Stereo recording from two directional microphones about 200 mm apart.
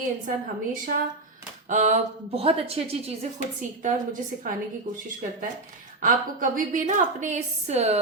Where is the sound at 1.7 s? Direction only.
35° right (ahead or behind).